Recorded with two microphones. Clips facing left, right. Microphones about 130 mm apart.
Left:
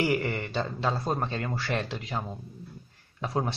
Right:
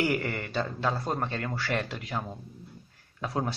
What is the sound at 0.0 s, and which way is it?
Speech, centre (ahead or behind).